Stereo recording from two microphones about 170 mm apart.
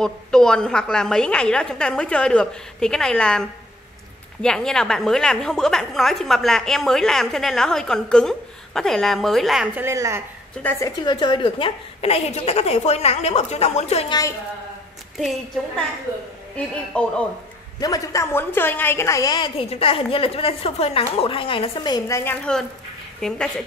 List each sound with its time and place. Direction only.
0.0 s a woman's voice: 5° left (ahead or behind)
9.8 s a woman's voice: 15° right (ahead or behind)
10.6 s a woman's voice: 10° left (ahead or behind)
11.1 s a woman's voice: 30° left (ahead or behind)
16.5 s a woman's voice: 5° left (ahead or behind)
17.7 s a woman's voice: 20° left (ahead or behind)
19.7 s a woman's voice: 35° left (ahead or behind); by 23.5 s 5° left (ahead or behind)